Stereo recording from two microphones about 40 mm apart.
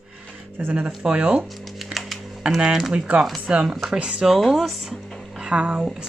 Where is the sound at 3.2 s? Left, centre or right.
Centre.